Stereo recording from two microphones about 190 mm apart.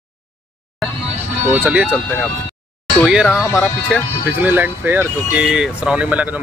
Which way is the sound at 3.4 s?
15° left (ahead or behind).